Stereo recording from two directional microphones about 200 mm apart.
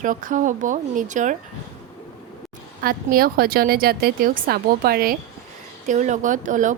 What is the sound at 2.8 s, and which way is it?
A woman's voice, 45° right (ahead or behind).